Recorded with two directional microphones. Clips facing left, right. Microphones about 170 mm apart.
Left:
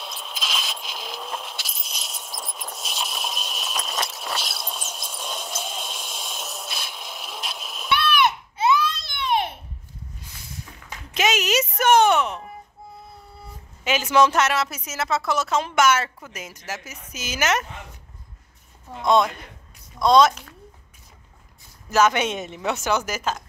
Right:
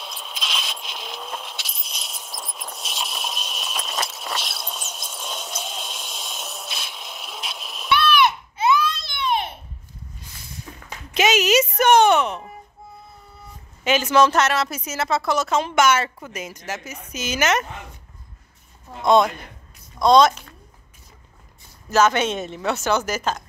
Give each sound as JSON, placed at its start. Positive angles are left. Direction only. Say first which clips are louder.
{"t": 0.0, "sound": "keys jangling", "louder": "even", "side_deg": 0}
{"t": 7.9, "sound": "a sound", "louder": "right 3 dB", "side_deg": 55}
{"t": 8.5, "sound": "baby cry", "louder": "right 1 dB", "side_deg": 30}
{"t": 9.0, "sound": "a sound", "louder": "even", "side_deg": 60}
{"t": 11.1, "sound": "music", "louder": "right 4 dB", "side_deg": 0}
{"t": 13.8, "sound": "a woman's voice", "louder": "right 2 dB", "side_deg": 10}
{"t": 19.0, "sound": "a woman's voice", "louder": "right 3 dB", "side_deg": 0}
{"t": 21.9, "sound": "speech", "louder": "right 1 dB", "side_deg": 15}